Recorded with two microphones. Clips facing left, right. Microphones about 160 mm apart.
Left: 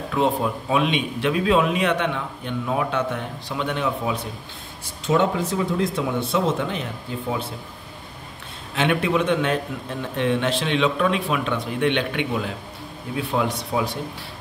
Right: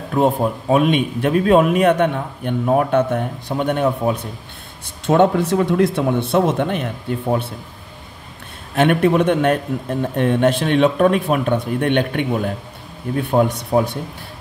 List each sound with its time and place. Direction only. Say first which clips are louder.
0.1 s a man's voice: right 5 dB; 40° right (ahead or behind); by 7.4 s 55° right (ahead or behind)
8.7 s a man's voice: right 6 dB; 50° right (ahead or behind)